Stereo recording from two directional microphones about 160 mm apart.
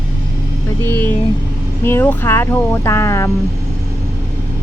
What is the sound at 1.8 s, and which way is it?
Speech, 10° left (ahead or behind).